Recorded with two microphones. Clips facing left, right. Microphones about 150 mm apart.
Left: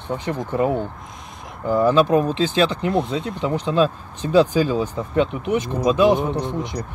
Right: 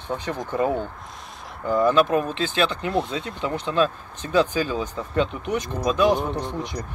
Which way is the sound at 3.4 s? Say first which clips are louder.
Left 3 dB; 30° left (ahead or behind).